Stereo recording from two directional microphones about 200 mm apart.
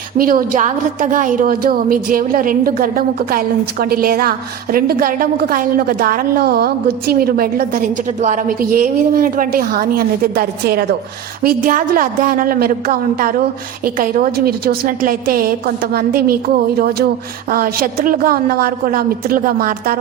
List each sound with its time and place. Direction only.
0.2 s a woman's voice: 45° right (ahead or behind)